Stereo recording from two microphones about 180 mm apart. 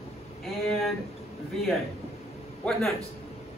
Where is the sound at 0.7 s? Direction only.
Centre (ahead or behind).